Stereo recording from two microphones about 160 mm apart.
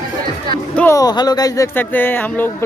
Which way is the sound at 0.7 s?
20° left (ahead or behind).